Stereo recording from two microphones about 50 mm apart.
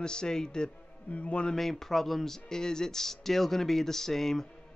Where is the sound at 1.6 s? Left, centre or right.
Centre.